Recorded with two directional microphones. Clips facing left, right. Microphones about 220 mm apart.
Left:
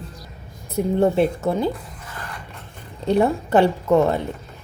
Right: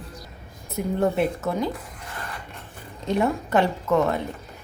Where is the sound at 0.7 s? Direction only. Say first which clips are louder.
Left 5 dB; 30° left (ahead or behind).